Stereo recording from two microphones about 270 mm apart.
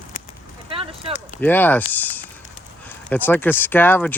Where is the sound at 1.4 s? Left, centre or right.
Centre.